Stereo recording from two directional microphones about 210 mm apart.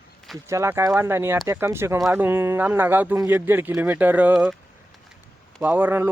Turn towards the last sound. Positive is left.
turn(degrees=-10)  # may be behind; listen again after turning